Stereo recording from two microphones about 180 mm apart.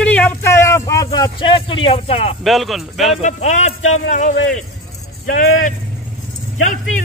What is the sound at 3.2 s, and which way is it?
Speech, 40° left (ahead or behind).